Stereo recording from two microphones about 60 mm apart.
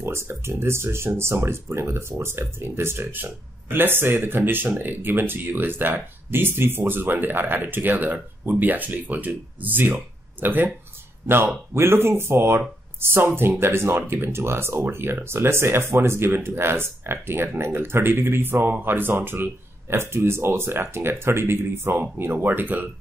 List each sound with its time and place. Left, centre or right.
0.0 s speech: right